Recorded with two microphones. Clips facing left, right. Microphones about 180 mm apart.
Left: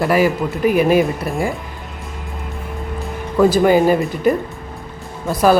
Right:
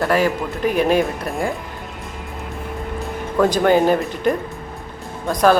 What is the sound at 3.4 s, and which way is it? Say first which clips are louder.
A man's voice: left 3 dB; 5° left (ahead or behind).